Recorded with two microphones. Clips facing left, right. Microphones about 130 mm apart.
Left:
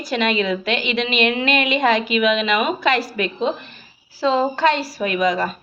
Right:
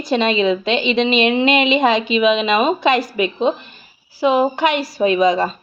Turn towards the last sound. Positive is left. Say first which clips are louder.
# right 5 dB
turn(degrees=-25)  # may be behind; listen again after turning